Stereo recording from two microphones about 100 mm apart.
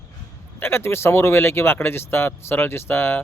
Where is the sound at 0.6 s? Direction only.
25° left (ahead or behind).